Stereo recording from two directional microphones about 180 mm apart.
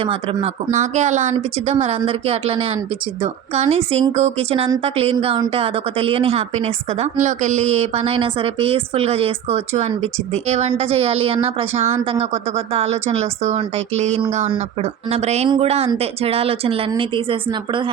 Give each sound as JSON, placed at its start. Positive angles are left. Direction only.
{"t": 0.0, "sound": "a woman's voice", "side_deg": -30}
{"t": 0.7, "sound": "a woman's voice", "side_deg": -40}